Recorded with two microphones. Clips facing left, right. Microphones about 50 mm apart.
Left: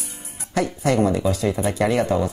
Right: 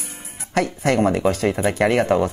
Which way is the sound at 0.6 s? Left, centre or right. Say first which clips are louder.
Even; right.